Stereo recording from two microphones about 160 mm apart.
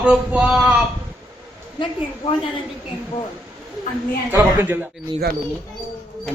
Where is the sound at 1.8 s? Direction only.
35° left (ahead or behind).